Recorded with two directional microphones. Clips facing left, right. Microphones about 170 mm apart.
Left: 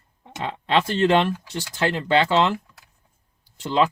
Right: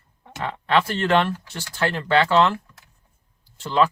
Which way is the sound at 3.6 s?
20° left (ahead or behind).